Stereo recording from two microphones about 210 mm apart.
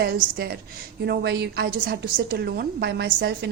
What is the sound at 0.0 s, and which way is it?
A woman's voice, 50° right (ahead or behind).